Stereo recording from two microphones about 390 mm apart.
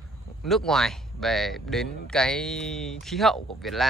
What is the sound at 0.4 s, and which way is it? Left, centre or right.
Speech, centre.